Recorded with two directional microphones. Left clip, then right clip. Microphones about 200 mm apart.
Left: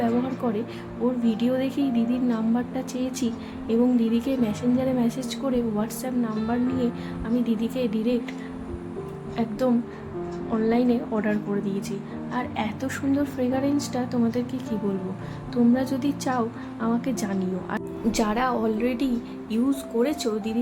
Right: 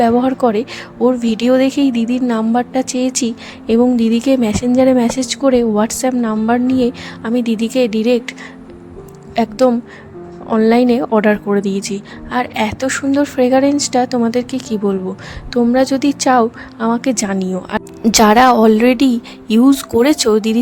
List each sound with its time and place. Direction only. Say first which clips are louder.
0.0 s a woman's voice: right 13 dB; 55° right (ahead or behind)